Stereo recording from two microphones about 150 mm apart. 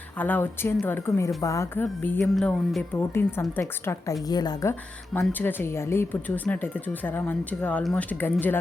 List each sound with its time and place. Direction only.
0.2 s a woman's voice: 10° left (ahead or behind)
5.2 s speech: 10° left (ahead or behind)